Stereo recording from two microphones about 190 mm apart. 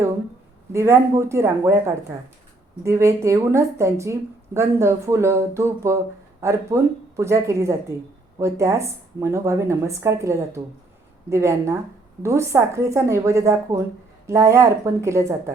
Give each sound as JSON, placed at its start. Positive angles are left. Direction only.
{"t": 0.7, "sound": "a woman's voice", "side_deg": -15}